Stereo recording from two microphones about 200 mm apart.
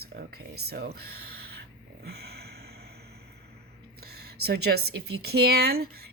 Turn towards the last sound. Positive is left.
turn(degrees=-50)  # may be behind; listen again after turning